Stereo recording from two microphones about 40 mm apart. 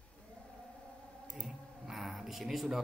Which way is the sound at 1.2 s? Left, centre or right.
Centre.